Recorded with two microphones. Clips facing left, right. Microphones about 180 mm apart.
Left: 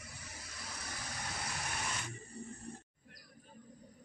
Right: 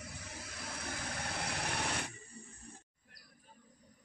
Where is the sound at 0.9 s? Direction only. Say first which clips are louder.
Right 4 dB; 55° right (ahead or behind).